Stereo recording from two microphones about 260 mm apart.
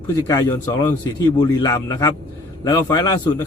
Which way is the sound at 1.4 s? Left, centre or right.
Centre.